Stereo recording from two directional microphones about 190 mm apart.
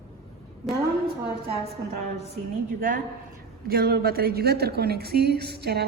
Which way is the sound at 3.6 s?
50° right (ahead or behind).